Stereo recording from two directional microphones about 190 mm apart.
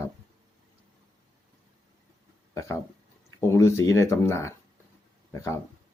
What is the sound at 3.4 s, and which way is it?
Speech, 15° left (ahead or behind).